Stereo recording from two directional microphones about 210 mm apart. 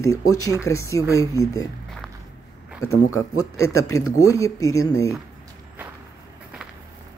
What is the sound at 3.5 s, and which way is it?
Speech, 15° left (ahead or behind).